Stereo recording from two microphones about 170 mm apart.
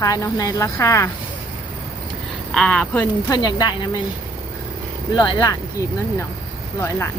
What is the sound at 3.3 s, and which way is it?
Speech, 25° left (ahead or behind).